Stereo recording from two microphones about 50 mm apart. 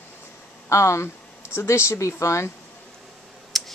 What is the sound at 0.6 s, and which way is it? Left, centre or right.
Speech, left.